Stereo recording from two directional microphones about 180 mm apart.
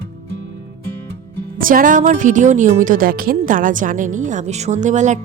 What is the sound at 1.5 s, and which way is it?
Speech, 50° right (ahead or behind).